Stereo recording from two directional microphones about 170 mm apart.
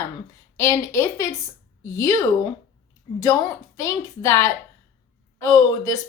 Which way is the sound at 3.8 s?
15° left (ahead or behind).